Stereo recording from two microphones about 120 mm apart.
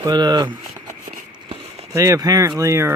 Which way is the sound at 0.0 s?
35° right (ahead or behind).